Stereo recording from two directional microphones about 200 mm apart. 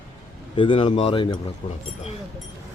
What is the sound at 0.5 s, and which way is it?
Speech, 25° left (ahead or behind).